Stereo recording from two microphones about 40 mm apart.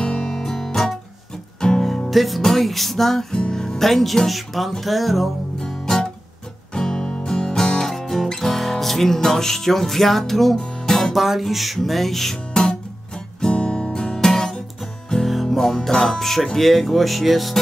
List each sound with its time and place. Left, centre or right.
0.0 s music: centre
1.9 s speech: centre
3.3 s speech: centre
5.6 s music: centre
11.1 s speech: centre
13.5 s guitar: left
15.4 s music: centre
16.5 s speech: centre